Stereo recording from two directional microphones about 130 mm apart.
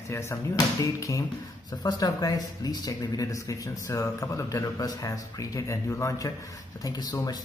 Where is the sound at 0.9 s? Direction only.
25° left (ahead or behind).